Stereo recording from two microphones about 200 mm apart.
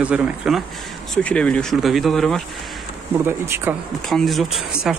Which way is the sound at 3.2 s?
10° right (ahead or behind).